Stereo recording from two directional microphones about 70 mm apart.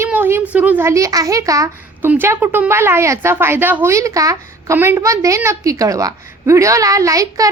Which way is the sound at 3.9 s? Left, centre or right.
Right.